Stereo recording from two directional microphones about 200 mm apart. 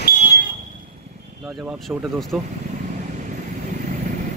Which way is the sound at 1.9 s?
Centre (ahead or behind).